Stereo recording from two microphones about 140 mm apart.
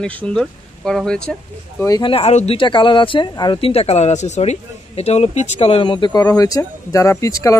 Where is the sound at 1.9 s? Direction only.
30° left (ahead or behind).